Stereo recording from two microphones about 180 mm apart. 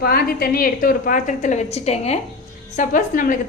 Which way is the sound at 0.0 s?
60° left (ahead or behind).